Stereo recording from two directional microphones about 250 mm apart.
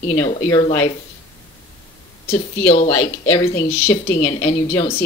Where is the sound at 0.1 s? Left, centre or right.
Centre.